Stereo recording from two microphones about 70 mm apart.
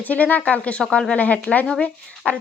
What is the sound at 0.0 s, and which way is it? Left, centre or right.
Speech, left.